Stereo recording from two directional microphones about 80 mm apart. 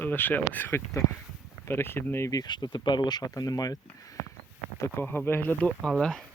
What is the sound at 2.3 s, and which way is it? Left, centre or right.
Speech, left.